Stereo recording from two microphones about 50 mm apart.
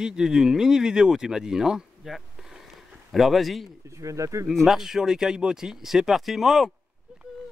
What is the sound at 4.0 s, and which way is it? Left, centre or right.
Speech, right.